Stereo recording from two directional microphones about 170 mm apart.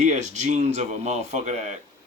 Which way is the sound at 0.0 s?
45° right (ahead or behind).